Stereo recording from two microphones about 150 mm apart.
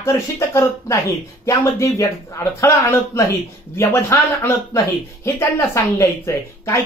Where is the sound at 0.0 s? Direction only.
20° left (ahead or behind).